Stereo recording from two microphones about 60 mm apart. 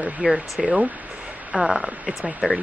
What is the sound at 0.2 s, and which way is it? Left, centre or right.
Speech, centre.